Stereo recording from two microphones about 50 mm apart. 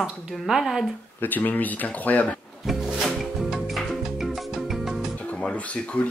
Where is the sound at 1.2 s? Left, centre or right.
Left.